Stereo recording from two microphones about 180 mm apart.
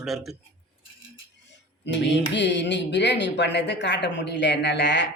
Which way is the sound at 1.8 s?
75° left (ahead or behind).